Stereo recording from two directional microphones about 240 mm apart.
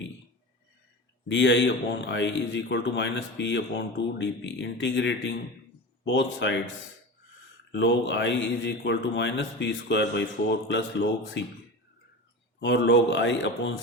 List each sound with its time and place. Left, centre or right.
1.3 s a man's voice: left
7.7 s a man's voice: left
12.5 s a man's voice: left